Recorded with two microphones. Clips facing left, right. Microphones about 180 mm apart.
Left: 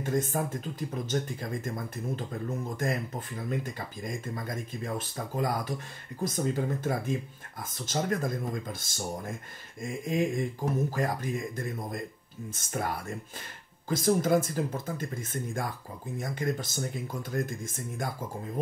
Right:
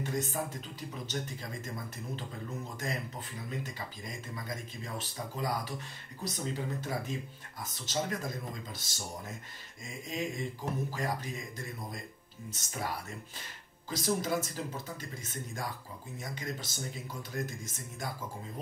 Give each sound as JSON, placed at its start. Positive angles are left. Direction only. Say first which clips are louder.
{"t": 0.0, "sound": "speech", "louder": "left 5 dB", "side_deg": 50}
{"t": 3.4, "sound": "speech", "louder": "left 6 dB", "side_deg": 50}